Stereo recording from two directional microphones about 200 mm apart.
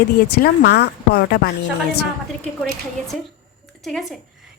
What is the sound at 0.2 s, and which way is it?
A woman's voice, 50° left (ahead or behind).